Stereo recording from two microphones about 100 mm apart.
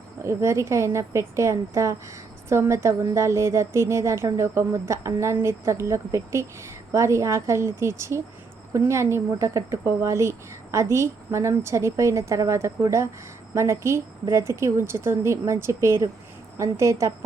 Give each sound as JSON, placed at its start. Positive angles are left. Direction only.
{"t": 0.3, "sound": "a woman's voice", "side_deg": -30}